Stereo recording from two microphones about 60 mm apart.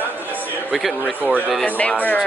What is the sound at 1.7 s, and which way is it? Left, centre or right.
Speech, left.